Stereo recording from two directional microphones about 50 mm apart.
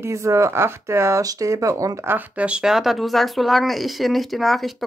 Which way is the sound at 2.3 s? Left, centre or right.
Right.